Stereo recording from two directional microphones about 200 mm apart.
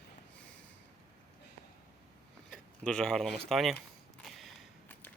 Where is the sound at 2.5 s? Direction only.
5° left (ahead or behind).